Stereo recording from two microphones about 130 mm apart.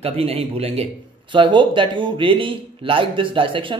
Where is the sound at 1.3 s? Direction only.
40° right (ahead or behind).